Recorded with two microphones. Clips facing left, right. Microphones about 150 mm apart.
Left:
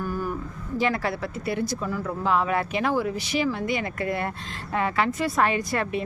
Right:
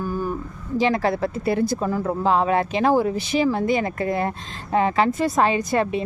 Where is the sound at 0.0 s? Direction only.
20° right (ahead or behind).